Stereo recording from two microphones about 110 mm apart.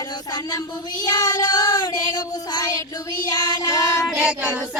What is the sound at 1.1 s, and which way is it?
Child singing, 40° left (ahead or behind).